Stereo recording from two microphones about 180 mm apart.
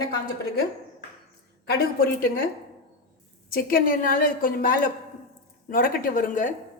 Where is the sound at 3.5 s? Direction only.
55° left (ahead or behind).